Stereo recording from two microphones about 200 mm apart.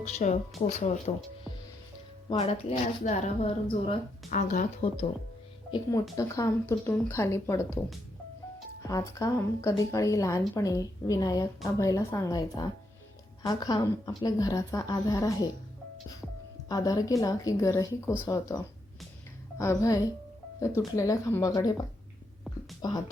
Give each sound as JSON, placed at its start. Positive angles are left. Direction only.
{"t": 0.2, "sound": "speech", "side_deg": 35}
{"t": 2.4, "sound": "speech", "side_deg": 30}
{"t": 5.7, "sound": "a woman's voice", "side_deg": 15}
{"t": 16.6, "sound": "a woman's voice", "side_deg": 20}